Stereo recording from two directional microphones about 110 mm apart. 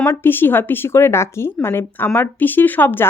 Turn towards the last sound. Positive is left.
turn(degrees=20)  # may be behind; listen again after turning